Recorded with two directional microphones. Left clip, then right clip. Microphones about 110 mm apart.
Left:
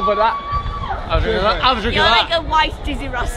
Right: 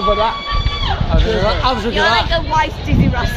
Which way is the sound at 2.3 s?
20° left (ahead or behind).